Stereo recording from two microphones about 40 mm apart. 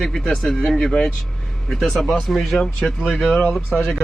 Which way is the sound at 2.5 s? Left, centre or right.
Centre.